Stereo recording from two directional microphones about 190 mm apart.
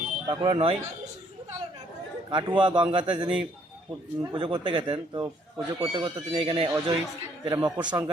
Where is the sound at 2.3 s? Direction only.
25° right (ahead or behind).